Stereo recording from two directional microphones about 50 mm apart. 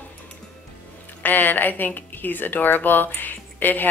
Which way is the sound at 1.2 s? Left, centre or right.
Left.